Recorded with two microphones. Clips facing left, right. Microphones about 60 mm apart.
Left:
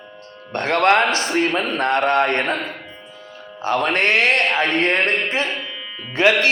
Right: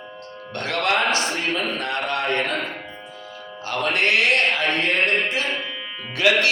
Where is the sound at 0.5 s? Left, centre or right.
Left.